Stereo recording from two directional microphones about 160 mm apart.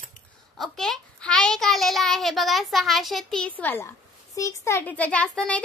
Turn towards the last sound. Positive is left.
turn(degrees=5)  # may be behind; listen again after turning